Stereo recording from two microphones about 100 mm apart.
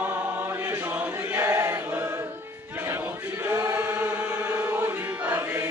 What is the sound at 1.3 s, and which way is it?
Chant, 25° right (ahead or behind).